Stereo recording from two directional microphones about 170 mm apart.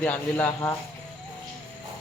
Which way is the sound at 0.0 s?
10° left (ahead or behind).